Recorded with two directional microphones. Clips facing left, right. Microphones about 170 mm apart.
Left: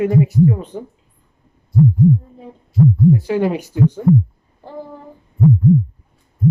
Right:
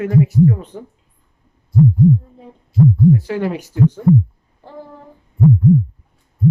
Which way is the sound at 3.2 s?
20° left (ahead or behind).